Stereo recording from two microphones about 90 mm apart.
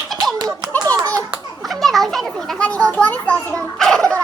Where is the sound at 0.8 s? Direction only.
45° right (ahead or behind).